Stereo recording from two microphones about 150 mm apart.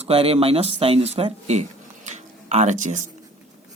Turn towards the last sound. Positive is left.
turn(degrees=-55)  # may be behind; listen again after turning